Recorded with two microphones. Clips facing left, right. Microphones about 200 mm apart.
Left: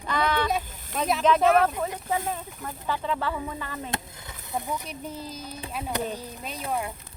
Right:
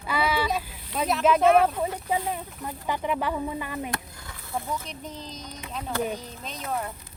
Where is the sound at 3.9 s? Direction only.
20° left (ahead or behind).